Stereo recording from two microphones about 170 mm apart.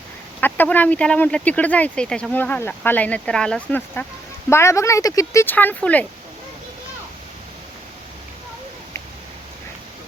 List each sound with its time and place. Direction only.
0.3 s speech: 10° left (ahead or behind)